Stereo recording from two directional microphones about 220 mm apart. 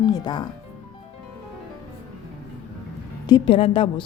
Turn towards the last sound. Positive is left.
turn(degrees=25)  # may be behind; listen again after turning